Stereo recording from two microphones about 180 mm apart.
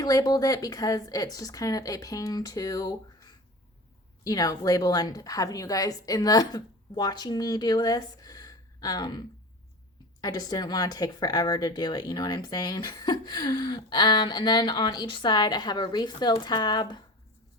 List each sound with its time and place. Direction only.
0.0 s speech: 20° left (ahead or behind)